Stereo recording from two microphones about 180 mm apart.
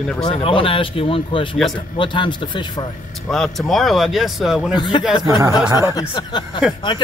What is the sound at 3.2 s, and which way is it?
Speech, centre (ahead or behind).